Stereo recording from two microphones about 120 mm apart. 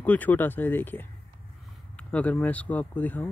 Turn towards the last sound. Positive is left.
turn(degrees=15)  # may be behind; listen again after turning